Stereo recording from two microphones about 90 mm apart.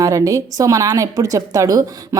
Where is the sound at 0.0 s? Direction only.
40° right (ahead or behind).